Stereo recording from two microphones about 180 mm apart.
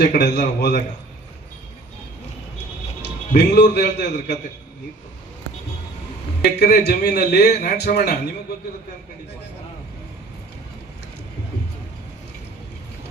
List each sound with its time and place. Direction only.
0.0 s a man's voice: 65° left (ahead or behind)
3.0 s a man's voice: 70° left (ahead or behind)
6.6 s a man's voice: 65° left (ahead or behind)